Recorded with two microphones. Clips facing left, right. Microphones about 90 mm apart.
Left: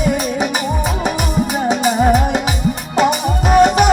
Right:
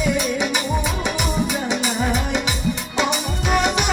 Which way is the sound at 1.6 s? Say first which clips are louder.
Left 8 dB; 40° left (ahead or behind).